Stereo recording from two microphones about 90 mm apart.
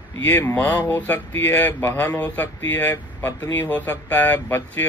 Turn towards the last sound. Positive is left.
turn(degrees=20)  # may be behind; listen again after turning